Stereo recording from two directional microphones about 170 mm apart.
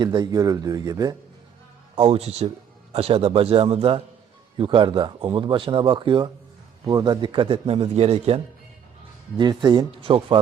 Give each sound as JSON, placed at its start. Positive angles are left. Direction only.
{"t": 0.0, "sound": "speech", "side_deg": -25}
{"t": 2.0, "sound": "a man's voice", "side_deg": -35}
{"t": 9.4, "sound": "speech", "side_deg": -25}